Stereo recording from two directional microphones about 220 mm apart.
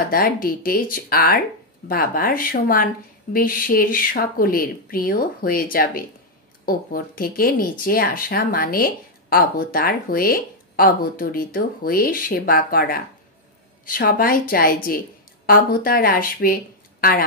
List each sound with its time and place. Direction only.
0.1 s speech: 40° left (ahead or behind)